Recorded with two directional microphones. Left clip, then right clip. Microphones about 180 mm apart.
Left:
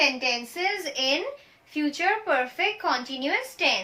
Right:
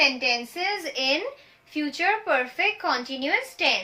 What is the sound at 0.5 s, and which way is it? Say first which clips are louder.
A woman's voice: even; 20° right (ahead or behind).